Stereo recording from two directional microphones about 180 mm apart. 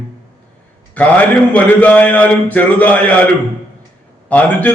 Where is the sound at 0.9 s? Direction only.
10° left (ahead or behind).